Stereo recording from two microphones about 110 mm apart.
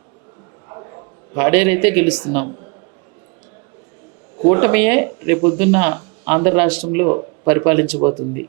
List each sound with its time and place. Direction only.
0.7 s a man's voice: 35° right (ahead or behind)
4.4 s speech: 25° right (ahead or behind)